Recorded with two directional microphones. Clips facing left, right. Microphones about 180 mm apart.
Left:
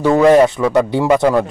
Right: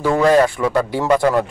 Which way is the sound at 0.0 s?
20° left (ahead or behind).